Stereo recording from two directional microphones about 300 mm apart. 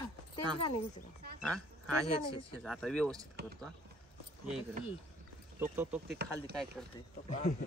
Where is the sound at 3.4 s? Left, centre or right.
Right.